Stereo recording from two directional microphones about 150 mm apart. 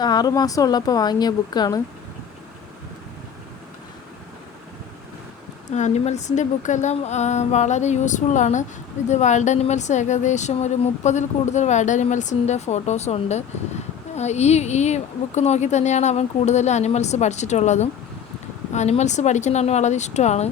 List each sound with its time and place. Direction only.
0.0 s speech: 25° left (ahead or behind)
5.7 s speech: 50° left (ahead or behind)